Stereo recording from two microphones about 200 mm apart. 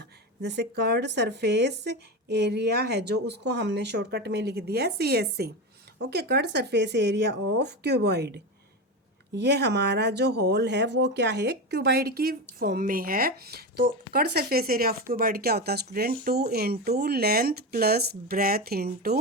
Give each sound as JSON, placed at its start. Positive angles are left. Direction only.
{"t": 0.0, "sound": "speech", "side_deg": -55}